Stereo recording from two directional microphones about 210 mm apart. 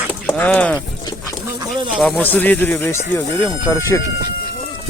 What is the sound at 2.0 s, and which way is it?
Speech, 5° left (ahead or behind).